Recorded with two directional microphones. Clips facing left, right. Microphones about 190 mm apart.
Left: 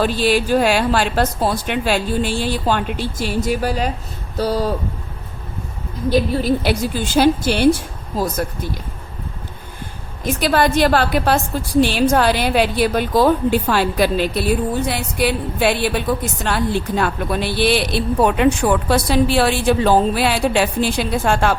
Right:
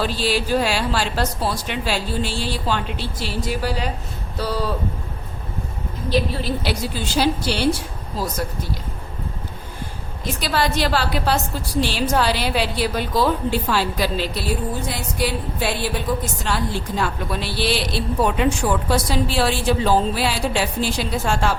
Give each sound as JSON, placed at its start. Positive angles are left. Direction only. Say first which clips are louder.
{"t": 0.0, "sound": "speech", "louder": "left 5 dB", "side_deg": 55}
{"t": 6.1, "sound": "speech", "louder": "left 5 dB", "side_deg": 50}
{"t": 10.4, "sound": "a woman's voice", "louder": "left 6 dB", "side_deg": 50}